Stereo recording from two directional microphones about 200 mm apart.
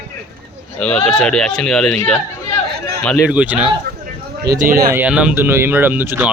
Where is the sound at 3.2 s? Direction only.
5° right (ahead or behind).